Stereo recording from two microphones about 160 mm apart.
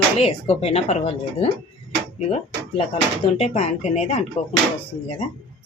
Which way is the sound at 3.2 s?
40° left (ahead or behind).